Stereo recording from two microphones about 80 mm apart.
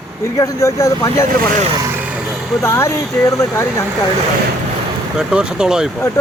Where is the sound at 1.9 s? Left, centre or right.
Centre.